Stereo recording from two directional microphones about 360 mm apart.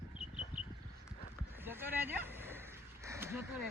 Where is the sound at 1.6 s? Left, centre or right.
Centre.